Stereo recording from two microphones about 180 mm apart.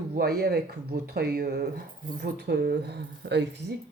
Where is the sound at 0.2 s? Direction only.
60° right (ahead or behind).